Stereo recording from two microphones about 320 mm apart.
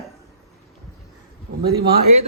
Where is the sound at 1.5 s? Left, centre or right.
Right.